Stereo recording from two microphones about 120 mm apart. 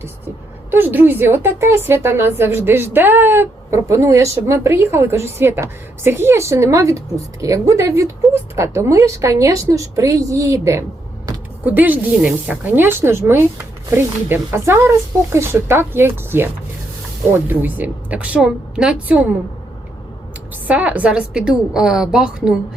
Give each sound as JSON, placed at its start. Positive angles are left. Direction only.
{"t": 0.7, "sound": "speech", "side_deg": -15}
{"t": 11.6, "sound": "a woman's voice", "side_deg": -15}
{"t": 20.7, "sound": "a woman's voice", "side_deg": -10}